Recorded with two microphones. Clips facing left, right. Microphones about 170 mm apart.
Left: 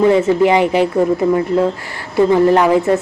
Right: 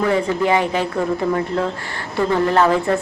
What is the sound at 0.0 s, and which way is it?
Speech, 20° left (ahead or behind).